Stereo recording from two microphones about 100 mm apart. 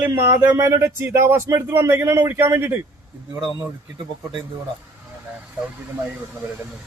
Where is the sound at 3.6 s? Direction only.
50° right (ahead or behind).